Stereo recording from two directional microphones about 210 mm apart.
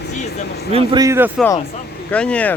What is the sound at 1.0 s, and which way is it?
Speech, 15° right (ahead or behind).